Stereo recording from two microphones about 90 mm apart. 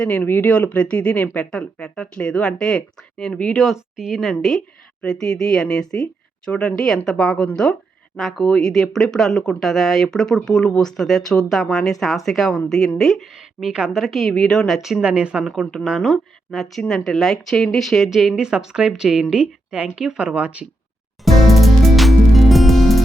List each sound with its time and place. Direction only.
0.2 s speech: 25° left (ahead or behind)
0.5 s speech: 15° left (ahead or behind); by 15.4 s 10° right (ahead or behind)
15.7 s speech: centre (ahead or behind)
21.2 s music: centre (ahead or behind)